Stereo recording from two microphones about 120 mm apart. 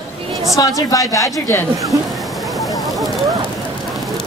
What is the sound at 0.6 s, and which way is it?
Speech, 25° left (ahead or behind).